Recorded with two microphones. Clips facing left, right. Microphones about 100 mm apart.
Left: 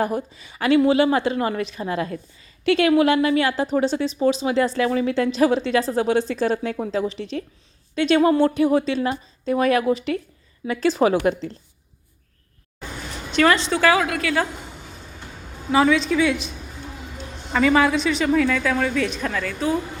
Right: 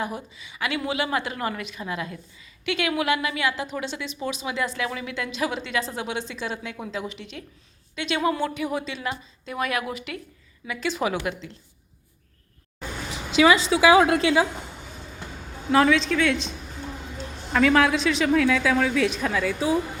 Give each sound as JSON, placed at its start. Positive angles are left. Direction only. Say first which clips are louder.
{"t": 0.0, "sound": "a woman's voice", "louder": "left 7 dB", "side_deg": 45}
{"t": 13.3, "sound": "a woman's voice", "louder": "even", "side_deg": -5}
{"t": 13.9, "sound": "a woman's voice", "louder": "right 4 dB", "side_deg": -25}
{"t": 15.7, "sound": "a woman's voice", "louder": "left 2 dB", "side_deg": 0}
{"t": 17.5, "sound": "a woman's voice", "louder": "left 2 dB", "side_deg": 0}